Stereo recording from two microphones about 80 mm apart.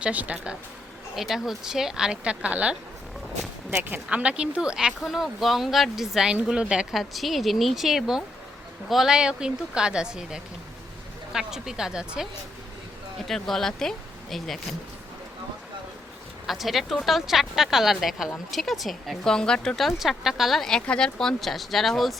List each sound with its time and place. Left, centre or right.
0.0 s a woman's voice: centre
1.1 s a woman's voice: centre
3.8 s a woman's voice: centre
7.0 s a woman's voice: centre
13.2 s speech: centre
16.5 s speech: centre